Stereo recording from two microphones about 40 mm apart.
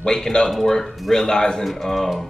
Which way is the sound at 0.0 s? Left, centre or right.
Centre.